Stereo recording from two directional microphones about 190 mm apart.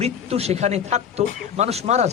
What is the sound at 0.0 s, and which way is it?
Speech, 35° right (ahead or behind).